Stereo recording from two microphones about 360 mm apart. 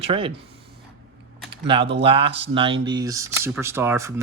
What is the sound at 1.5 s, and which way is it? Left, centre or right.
Speech, centre.